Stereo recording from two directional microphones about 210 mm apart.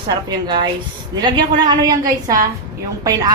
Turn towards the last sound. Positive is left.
turn(degrees=-15)  # may be behind; listen again after turning